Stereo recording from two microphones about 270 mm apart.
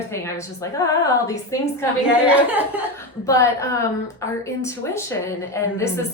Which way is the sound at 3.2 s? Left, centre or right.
Centre.